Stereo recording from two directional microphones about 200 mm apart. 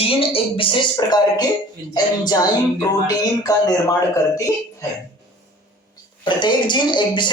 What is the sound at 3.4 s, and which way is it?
Music, 20° left (ahead or behind).